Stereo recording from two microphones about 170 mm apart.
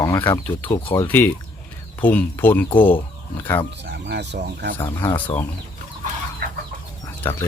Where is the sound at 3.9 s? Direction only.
85° right.